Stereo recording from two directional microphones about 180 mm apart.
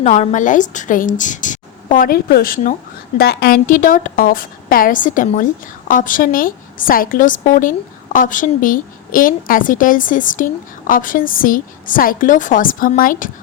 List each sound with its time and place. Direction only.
0.0 s a woman's voice: 40° left (ahead or behind)